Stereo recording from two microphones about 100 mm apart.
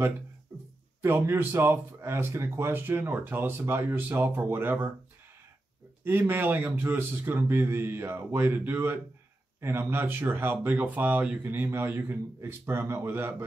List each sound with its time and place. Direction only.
1.0 s speech: 25° right (ahead or behind)
6.0 s speech: 20° right (ahead or behind)